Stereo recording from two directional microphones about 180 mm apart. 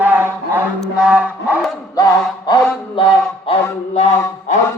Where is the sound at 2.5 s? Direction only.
30° left (ahead or behind).